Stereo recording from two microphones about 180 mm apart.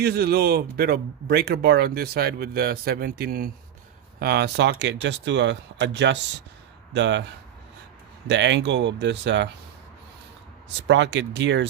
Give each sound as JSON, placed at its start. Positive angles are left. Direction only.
{"t": 0.0, "sound": "speech", "side_deg": -60}
{"t": 8.3, "sound": "speech", "side_deg": -75}
{"t": 10.8, "sound": "speech", "side_deg": -80}